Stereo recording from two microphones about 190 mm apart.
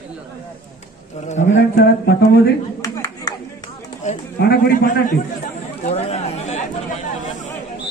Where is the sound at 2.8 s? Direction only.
15° left (ahead or behind).